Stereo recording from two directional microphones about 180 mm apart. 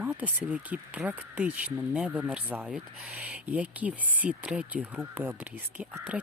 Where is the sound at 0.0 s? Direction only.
10° right (ahead or behind).